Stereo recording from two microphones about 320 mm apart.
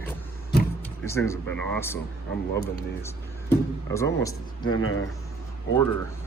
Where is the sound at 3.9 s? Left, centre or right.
Centre.